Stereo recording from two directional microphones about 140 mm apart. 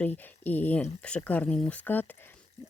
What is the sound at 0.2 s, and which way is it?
Speech, 10° left (ahead or behind).